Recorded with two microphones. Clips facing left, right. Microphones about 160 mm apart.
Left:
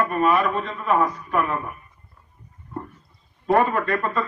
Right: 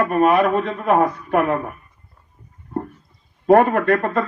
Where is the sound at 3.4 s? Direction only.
55° right (ahead or behind).